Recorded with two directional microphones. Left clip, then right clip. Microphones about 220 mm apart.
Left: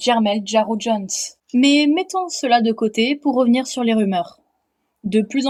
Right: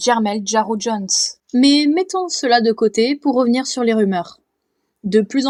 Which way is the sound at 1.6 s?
20° right (ahead or behind).